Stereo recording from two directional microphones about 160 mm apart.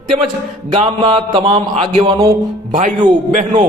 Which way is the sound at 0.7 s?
35° right (ahead or behind).